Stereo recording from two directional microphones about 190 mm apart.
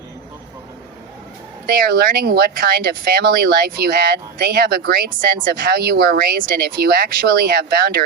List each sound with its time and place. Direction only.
1.6 s speech: 55° right (ahead or behind)